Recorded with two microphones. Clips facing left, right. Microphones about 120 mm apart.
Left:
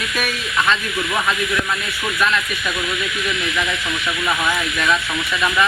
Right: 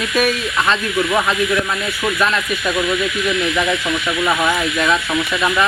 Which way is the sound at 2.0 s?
30° right (ahead or behind).